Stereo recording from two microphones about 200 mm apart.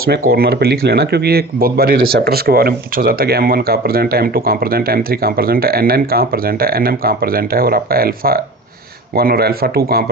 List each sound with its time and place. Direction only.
0.0 s speech: 50° right (ahead or behind)